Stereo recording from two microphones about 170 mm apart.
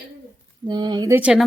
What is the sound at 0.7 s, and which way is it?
Speech, 25° right (ahead or behind).